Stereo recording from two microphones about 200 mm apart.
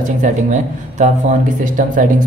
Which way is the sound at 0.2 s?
40° right (ahead or behind).